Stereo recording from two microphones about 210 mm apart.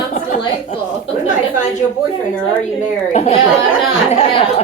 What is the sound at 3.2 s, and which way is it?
A woman's voice, 30° left (ahead or behind).